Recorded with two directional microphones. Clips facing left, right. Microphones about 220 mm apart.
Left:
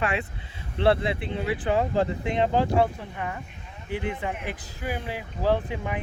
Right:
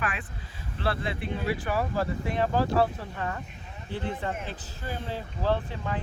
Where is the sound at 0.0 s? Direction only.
25° left (ahead or behind).